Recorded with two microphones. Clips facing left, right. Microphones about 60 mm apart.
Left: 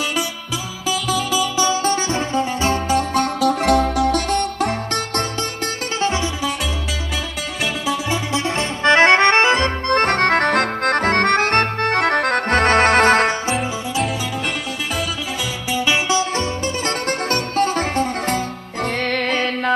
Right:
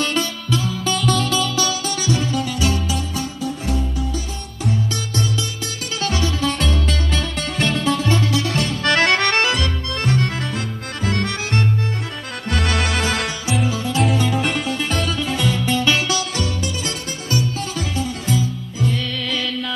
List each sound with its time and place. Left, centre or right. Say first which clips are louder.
0.8 s music: left 1 dB; centre
1.9 s music: left 2 dB; left
2.9 s music: left 8 dB; left
5.9 s music: left 2 dB; left
7.6 s music: right 2 dB; centre
8.3 s music: even; left
9.8 s accordion: left 8 dB; left
12.4 s accordion: left 6 dB; left
15.7 s music: left 1 dB; centre
16.1 s music: left 4 dB; left
17.3 s music: left 2 dB; left